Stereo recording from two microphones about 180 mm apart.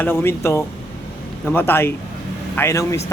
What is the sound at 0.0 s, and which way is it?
Speech, 10° left (ahead or behind).